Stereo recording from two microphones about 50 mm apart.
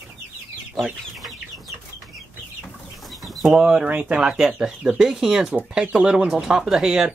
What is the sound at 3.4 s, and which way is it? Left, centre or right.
Speech, right.